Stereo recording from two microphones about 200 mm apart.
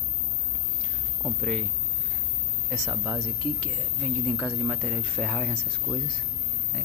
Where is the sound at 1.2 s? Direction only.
Centre (ahead or behind).